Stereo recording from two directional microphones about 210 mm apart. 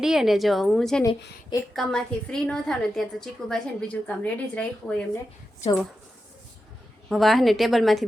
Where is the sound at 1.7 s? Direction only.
Centre (ahead or behind).